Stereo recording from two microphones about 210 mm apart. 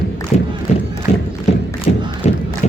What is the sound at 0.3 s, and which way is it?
Crowd, 35° left (ahead or behind).